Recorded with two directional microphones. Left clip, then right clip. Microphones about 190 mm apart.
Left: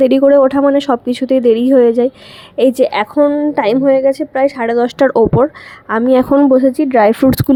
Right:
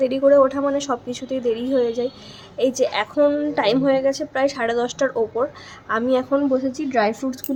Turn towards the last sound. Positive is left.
turn(degrees=50)  # may be behind; listen again after turning